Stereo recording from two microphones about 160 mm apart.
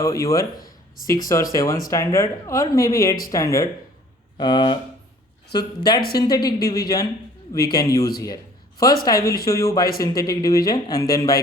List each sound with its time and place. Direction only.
0.0 s speech: 20° left (ahead or behind)
9.0 s speech: 20° left (ahead or behind)